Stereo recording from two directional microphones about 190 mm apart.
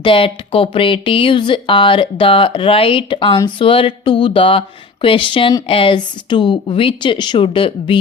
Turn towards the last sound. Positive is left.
turn(degrees=25)  # may be behind; listen again after turning